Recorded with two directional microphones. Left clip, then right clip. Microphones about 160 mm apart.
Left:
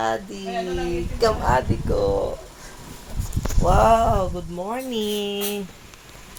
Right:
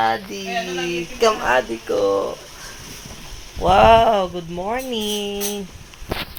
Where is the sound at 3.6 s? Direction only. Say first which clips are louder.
Right 5 dB; 30° right (ahead or behind).